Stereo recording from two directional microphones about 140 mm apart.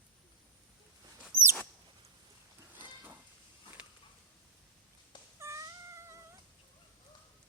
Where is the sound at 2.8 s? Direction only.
10° right (ahead or behind).